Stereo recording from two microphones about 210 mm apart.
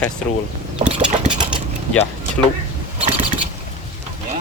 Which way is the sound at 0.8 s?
35° right (ahead or behind).